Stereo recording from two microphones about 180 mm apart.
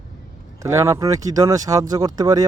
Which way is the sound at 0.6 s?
15° right (ahead or behind).